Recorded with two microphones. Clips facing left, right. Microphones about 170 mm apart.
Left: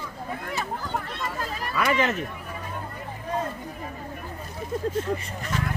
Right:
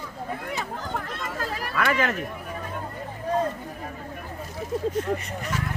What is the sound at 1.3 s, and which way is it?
Speech, 80° right.